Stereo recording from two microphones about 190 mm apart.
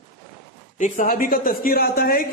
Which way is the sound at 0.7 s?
40° left (ahead or behind).